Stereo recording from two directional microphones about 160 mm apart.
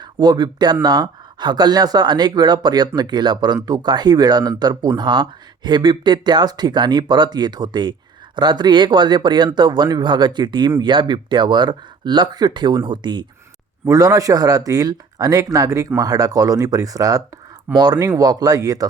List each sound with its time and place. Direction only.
0.0 s speech: 25° right (ahead or behind)